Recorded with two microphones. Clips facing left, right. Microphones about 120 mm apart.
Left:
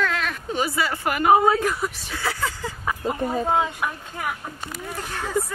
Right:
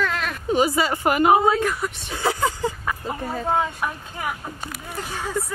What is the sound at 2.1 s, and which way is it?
Speech, 20° right (ahead or behind).